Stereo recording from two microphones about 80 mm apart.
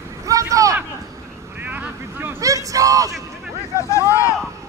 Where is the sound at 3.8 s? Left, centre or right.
Left.